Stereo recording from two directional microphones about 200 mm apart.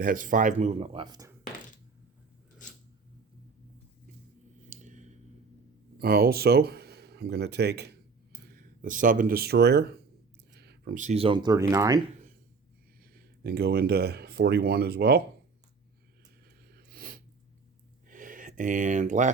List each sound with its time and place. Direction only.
0.0 s speech: 40° right (ahead or behind); by 1.4 s 20° right (ahead or behind)
4.7 s a sound: 40° right (ahead or behind)
6.0 s speech: 50° right (ahead or behind)
8.4 s speech: 45° right (ahead or behind)
10.5 s a sound: 55° right (ahead or behind)
10.9 s speech: 35° right (ahead or behind); by 11.9 s 15° right (ahead or behind)
13.1 s speech: 50° right (ahead or behind)
16.7 s snort: 45° right (ahead or behind)
18.1 s a sound: 40° right (ahead or behind)